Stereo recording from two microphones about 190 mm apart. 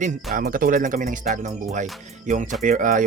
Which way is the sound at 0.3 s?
50° right (ahead or behind).